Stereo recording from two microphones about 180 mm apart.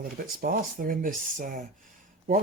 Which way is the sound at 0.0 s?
55° right (ahead or behind).